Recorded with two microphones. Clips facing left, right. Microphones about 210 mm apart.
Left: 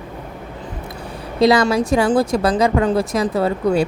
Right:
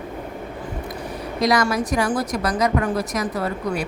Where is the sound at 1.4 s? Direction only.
25° left (ahead or behind).